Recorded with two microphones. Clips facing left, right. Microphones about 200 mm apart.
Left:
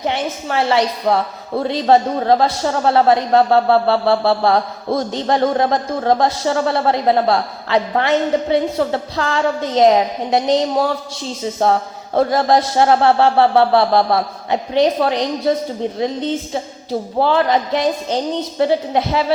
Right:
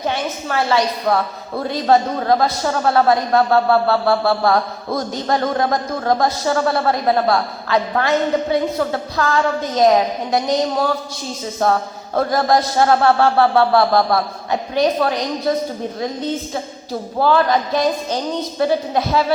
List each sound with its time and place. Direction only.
0.0 s a woman's voice: 25° left (ahead or behind)
17.2 s a woman's voice: 25° left (ahead or behind)